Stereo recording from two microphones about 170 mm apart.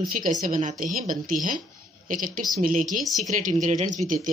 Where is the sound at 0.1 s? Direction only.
55° right (ahead or behind).